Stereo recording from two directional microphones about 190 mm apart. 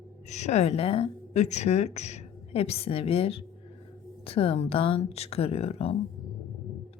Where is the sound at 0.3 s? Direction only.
35° left (ahead or behind).